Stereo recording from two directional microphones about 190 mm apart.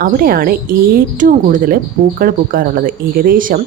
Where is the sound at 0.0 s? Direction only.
50° right (ahead or behind).